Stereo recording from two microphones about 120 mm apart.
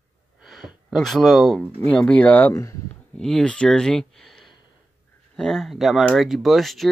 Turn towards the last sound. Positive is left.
turn(degrees=0)  # may be behind; listen again after turning